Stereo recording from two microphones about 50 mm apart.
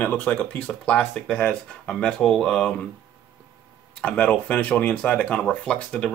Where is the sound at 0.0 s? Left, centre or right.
Left; by 2.7 s centre.